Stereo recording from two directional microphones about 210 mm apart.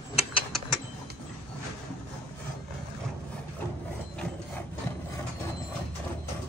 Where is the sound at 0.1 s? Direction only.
30° left (ahead or behind).